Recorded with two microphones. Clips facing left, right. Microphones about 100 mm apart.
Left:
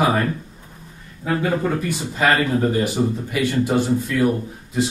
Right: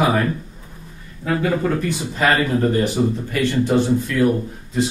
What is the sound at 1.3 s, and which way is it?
A man's voice, 5° left (ahead or behind).